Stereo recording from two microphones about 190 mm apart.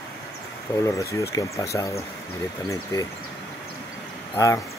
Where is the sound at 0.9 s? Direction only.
15° left (ahead or behind).